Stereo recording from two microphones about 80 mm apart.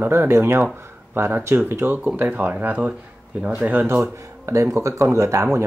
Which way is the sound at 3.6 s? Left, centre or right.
Right.